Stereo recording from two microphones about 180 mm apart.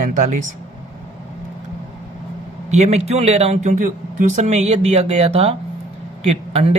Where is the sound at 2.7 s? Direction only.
40° right (ahead or behind).